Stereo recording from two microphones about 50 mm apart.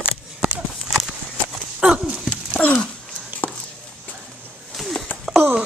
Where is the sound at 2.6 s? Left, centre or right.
Centre.